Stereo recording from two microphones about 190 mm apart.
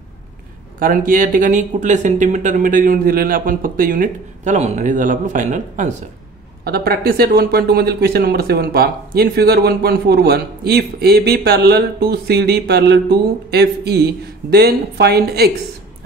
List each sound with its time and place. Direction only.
0.7 s speech: 45° right (ahead or behind)
6.6 s speech: 55° right (ahead or behind)